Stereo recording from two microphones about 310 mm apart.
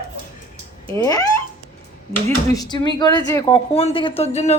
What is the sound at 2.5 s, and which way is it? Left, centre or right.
Speech, centre.